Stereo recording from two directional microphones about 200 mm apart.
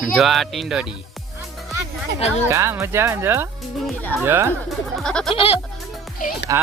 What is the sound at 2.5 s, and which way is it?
Speech, 15° right (ahead or behind).